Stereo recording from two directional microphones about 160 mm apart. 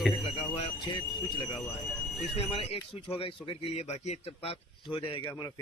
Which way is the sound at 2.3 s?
35° left (ahead or behind).